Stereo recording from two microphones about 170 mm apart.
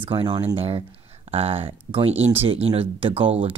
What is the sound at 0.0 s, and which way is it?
Speech, 30° right (ahead or behind).